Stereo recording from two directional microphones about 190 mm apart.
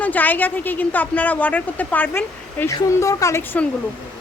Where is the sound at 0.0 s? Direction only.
10° left (ahead or behind).